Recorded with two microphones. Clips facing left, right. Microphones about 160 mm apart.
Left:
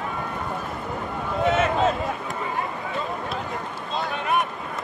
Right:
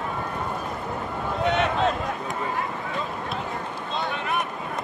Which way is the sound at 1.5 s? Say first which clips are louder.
Left 2 dB; centre (ahead or behind).